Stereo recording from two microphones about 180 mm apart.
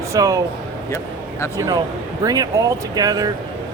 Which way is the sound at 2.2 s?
20° right (ahead or behind).